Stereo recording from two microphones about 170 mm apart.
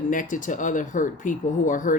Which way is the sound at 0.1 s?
50° left (ahead or behind).